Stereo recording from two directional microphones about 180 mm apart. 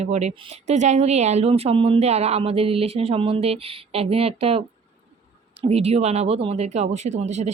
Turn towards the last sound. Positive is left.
turn(degrees=-40)  # may be behind; listen again after turning